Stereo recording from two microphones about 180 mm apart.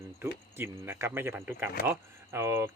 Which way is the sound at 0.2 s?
15° right (ahead or behind).